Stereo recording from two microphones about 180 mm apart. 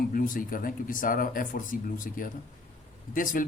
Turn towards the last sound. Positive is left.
turn(degrees=50)  # may be behind; listen again after turning